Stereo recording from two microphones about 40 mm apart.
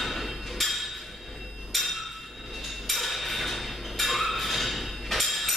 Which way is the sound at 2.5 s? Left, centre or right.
Centre.